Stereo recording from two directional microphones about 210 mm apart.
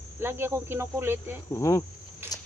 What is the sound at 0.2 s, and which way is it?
Speech, 10° right (ahead or behind).